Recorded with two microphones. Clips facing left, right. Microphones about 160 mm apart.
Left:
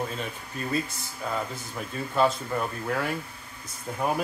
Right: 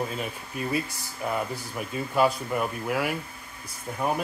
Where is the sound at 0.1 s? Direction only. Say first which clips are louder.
Right 1 dB; 10° right (ahead or behind).